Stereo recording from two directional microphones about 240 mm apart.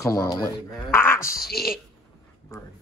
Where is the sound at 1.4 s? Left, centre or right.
Left.